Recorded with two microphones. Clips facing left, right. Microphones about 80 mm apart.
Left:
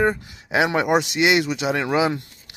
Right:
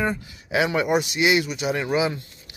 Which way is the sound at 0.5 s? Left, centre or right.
Left.